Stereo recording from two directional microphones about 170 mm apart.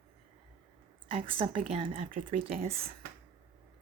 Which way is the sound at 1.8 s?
35° right (ahead or behind).